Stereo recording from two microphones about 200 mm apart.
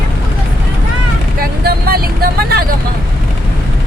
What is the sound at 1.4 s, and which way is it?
Vehicle, 50° right (ahead or behind).